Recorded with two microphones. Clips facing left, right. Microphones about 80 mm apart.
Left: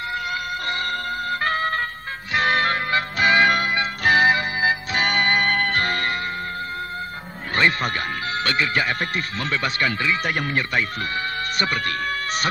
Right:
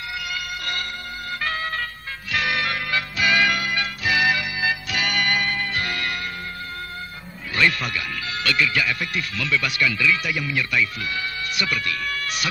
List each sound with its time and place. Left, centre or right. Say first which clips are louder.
0.3 s music: left 4 dB; left
5.5 s music: left 4 dB; left
7.5 s music: left 2 dB; left
8.5 s speech: right 1 dB; left